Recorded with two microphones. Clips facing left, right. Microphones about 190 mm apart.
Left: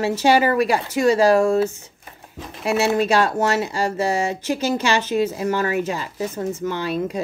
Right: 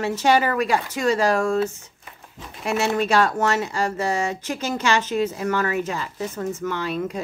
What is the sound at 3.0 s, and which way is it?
A woman's voice, 30° left (ahead or behind).